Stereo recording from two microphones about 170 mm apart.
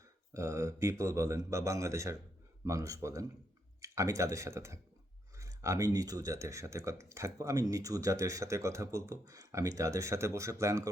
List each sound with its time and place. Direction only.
0.3 s speech: 20° right (ahead or behind)